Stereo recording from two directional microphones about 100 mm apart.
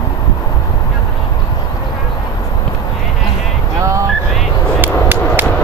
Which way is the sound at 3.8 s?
30° right (ahead or behind).